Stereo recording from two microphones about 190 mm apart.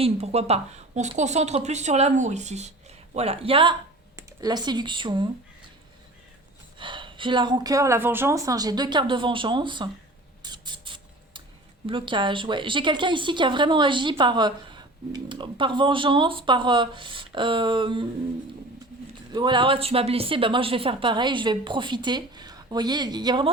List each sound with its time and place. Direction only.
0.0 s a woman's voice: 35° right (ahead or behind)
6.7 s a woman's voice: 25° right (ahead or behind)
10.4 s a sound: 25° right (ahead or behind)
11.9 s a woman's voice: 25° right (ahead or behind)
19.3 s a woman's voice: 25° right (ahead or behind)